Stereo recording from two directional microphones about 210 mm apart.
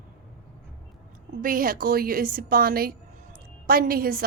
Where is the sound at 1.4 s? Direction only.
45° right (ahead or behind).